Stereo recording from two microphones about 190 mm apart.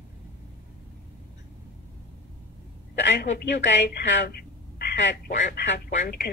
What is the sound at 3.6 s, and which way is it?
A woman's voice, 65° left (ahead or behind).